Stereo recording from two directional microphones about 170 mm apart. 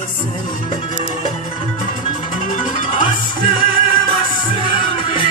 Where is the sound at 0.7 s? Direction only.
30° left (ahead or behind).